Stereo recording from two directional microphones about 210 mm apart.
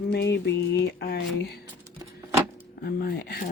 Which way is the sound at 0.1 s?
55° left (ahead or behind).